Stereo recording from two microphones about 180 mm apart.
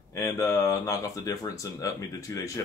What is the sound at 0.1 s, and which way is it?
Speech, 15° left (ahead or behind).